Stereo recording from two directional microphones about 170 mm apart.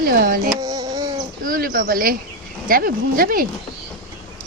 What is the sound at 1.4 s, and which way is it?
Speech, 55° right (ahead or behind).